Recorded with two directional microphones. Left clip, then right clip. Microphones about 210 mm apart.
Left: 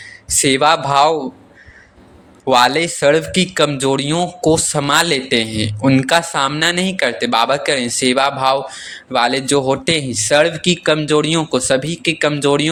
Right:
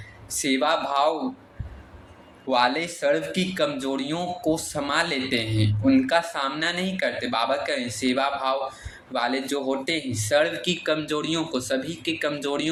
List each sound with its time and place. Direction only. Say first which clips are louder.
0.4 s speech: left 10 dB; 50° left (ahead or behind)
2.5 s speech: left 10 dB; 50° left (ahead or behind)